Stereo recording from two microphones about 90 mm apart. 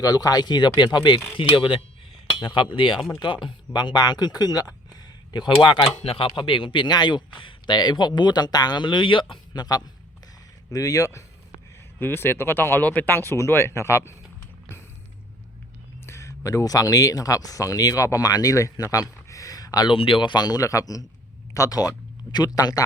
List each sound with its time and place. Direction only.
0.0 s speech: 45° left (ahead or behind)
1.4 s speech: 70° left (ahead or behind); by 4.7 s 45° left (ahead or behind)
5.6 s speech: 65° left (ahead or behind)
9.5 s speech: 45° left (ahead or behind)
10.7 s a sound: 40° left (ahead or behind)
11.9 s speech: 25° left (ahead or behind)
16.0 s speech: 35° left (ahead or behind)
19.9 s speech: 75° left (ahead or behind); by 22.8 s 40° left (ahead or behind)